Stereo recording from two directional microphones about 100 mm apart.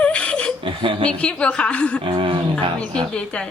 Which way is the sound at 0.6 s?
60° right (ahead or behind).